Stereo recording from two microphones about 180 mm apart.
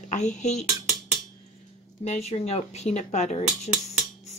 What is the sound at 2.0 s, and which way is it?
A woman's voice, 35° left (ahead or behind).